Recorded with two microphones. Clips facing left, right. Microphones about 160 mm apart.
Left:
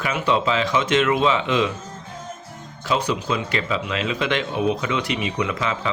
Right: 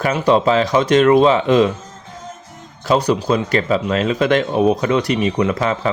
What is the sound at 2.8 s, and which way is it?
Speech, 40° right (ahead or behind).